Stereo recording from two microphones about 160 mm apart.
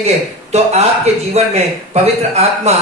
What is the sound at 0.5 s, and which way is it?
A man's voice, 40° right (ahead or behind).